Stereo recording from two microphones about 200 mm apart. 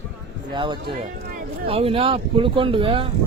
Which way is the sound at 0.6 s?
20° right (ahead or behind).